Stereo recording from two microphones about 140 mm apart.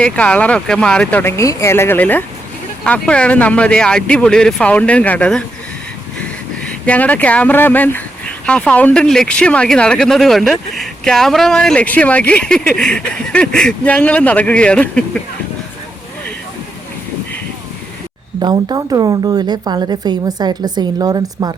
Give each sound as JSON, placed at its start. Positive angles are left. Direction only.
{"t": 0.0, "sound": "speech", "side_deg": 10}
{"t": 6.6, "sound": "speech", "side_deg": 10}
{"t": 18.3, "sound": "a woman's voice", "side_deg": -30}